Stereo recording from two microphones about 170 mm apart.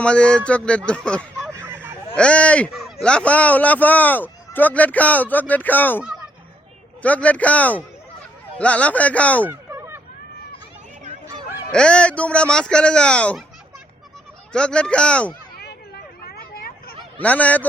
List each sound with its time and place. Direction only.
0.0 s a man's voice: 5° left (ahead or behind)
1.5 s a sound: 10° right (ahead or behind)
2.1 s a man's voice: 5° left (ahead or behind)
7.0 s a man's voice: 10° left (ahead or behind)
9.4 s a sound: 15° right (ahead or behind)
11.7 s speech: 5° left (ahead or behind)
14.5 s a man's voice: 5° left (ahead or behind)
16.2 s vehicle: 65° left (ahead or behind)
17.2 s a man's voice: 10° left (ahead or behind)